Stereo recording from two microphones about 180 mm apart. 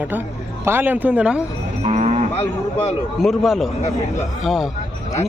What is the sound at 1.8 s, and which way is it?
Cattle, 40° right (ahead or behind).